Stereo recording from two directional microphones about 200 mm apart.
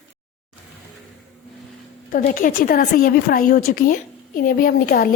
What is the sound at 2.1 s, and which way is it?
A woman's voice, 45° left (ahead or behind).